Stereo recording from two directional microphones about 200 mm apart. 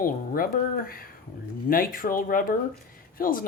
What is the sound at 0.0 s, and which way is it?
A woman's voice, 45° left (ahead or behind).